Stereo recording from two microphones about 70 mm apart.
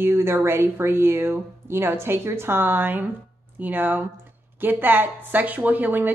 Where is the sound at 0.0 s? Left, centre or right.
Right.